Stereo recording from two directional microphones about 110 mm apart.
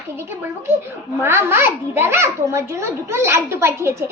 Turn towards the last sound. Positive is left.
turn(degrees=-25)  # may be behind; listen again after turning